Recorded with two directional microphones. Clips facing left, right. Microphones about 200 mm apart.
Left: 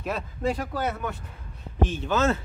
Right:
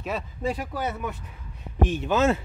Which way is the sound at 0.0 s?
5° right (ahead or behind).